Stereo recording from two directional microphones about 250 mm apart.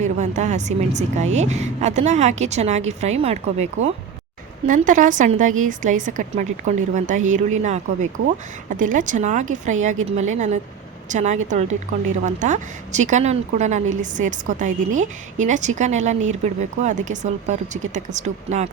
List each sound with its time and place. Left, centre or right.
0.0 s a woman's voice: right